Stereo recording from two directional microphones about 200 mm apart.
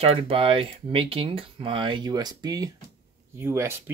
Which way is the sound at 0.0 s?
30° right (ahead or behind).